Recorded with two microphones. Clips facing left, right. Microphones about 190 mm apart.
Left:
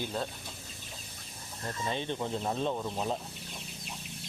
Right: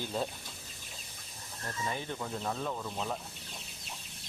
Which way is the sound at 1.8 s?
25° left (ahead or behind).